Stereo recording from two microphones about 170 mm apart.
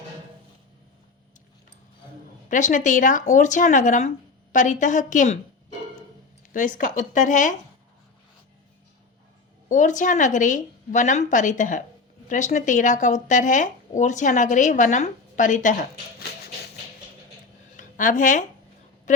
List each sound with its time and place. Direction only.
2.5 s speech: 50° left (ahead or behind)
6.5 s speech: 50° left (ahead or behind)
9.6 s speech: 45° left (ahead or behind)
17.7 s a woman's voice: 50° left (ahead or behind)